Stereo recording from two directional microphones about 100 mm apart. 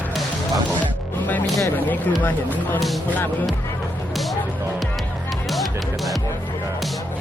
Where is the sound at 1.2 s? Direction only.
20° left (ahead or behind).